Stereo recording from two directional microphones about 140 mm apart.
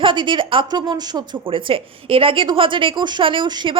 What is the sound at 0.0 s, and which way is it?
A woman's voice, 35° right (ahead or behind).